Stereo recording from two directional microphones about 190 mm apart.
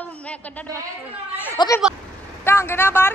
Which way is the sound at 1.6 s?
25° left (ahead or behind).